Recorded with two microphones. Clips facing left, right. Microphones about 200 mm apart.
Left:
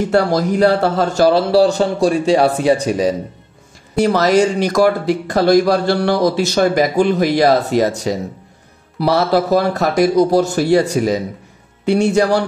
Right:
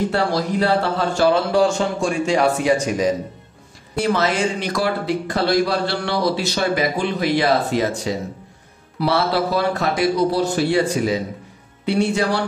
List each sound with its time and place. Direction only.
0.1 s speech: 45° left (ahead or behind)